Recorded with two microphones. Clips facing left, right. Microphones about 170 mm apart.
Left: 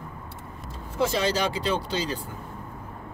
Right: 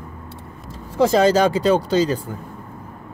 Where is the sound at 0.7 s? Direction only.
40° right (ahead or behind).